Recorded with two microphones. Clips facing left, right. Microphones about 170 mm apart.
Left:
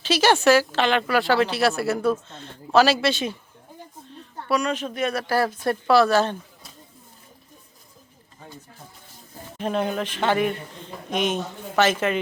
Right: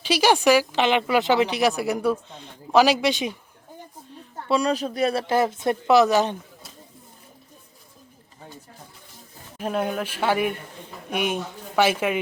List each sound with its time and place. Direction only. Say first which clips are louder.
0.0 s speech: even; 10° right (ahead or behind)
4.4 s a woman's voice: right 2 dB; 30° right (ahead or behind)
9.6 s speech: left 1 dB; 5° right (ahead or behind)